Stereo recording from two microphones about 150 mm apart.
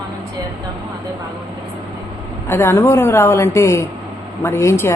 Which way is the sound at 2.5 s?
15° left (ahead or behind).